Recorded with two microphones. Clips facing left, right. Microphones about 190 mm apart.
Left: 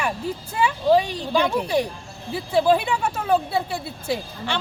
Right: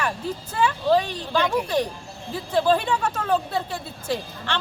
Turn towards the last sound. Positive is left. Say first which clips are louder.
# left 1 dB
turn(degrees=10)  # may be behind; listen again after turning